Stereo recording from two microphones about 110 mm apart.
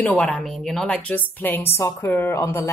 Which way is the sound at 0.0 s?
10° left (ahead or behind).